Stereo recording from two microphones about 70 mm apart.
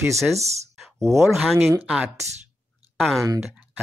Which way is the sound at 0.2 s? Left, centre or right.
Centre.